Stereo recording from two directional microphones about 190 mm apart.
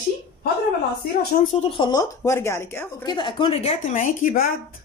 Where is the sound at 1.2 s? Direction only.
55° left (ahead or behind).